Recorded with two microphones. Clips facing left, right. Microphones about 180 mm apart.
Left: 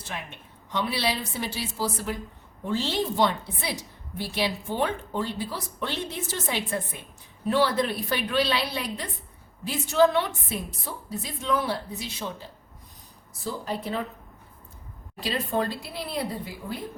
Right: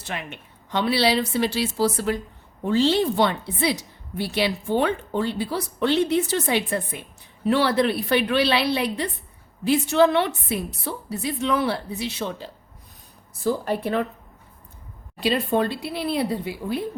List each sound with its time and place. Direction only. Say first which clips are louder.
0.1 s a woman's voice: right 5 dB; 75° right (ahead or behind)
15.2 s a woman's voice: right 6 dB; 70° right (ahead or behind)